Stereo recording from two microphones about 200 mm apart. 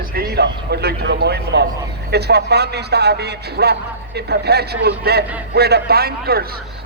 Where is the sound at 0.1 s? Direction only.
50° right (ahead or behind).